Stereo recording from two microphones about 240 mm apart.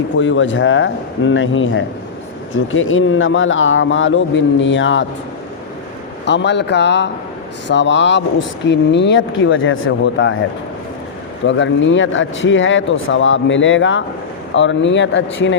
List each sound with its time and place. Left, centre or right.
0.2 s speech: left
6.2 s speech: left
11.4 s speech: left